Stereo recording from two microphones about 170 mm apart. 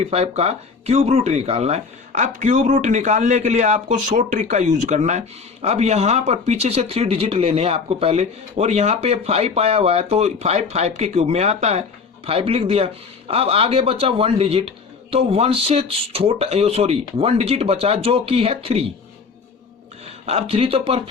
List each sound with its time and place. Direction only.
0.0 s speech: 40° right (ahead or behind)
20.2 s speech: 35° right (ahead or behind)